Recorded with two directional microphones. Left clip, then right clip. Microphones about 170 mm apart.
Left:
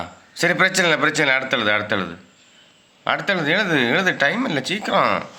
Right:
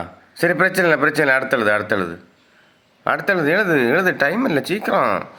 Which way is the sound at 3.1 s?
55° right (ahead or behind).